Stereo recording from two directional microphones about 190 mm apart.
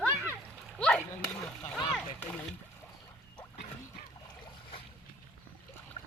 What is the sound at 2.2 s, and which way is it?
Splash, 10° left (ahead or behind).